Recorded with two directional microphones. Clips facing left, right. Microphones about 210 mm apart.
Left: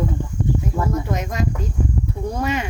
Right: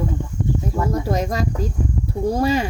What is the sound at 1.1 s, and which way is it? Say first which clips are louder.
Speech: right 3 dB; 35° right (ahead or behind).